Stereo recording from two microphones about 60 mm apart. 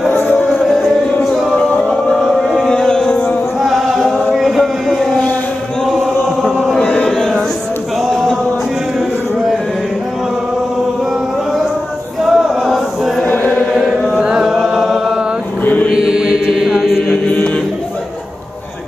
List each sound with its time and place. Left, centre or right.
0.1 s music: left
0.6 s music: centre
1.6 s a sound: centre
2.2 s music: centre
3.6 s chant: centre
8.0 s music: centre
12.2 s chant: centre
13.2 s chant: left
14.2 s chant: centre
15.6 s mantra: left
16.0 s mantra: centre